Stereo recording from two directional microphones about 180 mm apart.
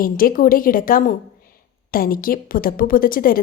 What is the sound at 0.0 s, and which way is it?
A woman's voice, 50° left (ahead or behind).